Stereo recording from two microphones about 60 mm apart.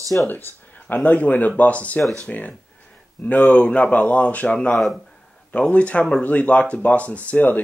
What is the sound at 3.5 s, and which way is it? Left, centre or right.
Speech, left.